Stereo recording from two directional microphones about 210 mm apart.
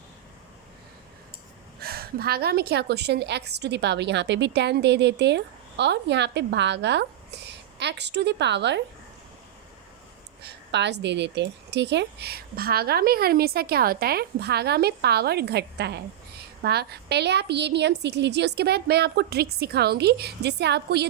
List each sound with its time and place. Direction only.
1.8 s a woman's voice: 45° right (ahead or behind)
10.4 s a woman's voice: 55° right (ahead or behind)